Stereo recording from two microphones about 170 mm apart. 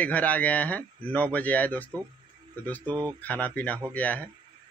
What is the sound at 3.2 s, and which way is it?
Speech, 10° left (ahead or behind).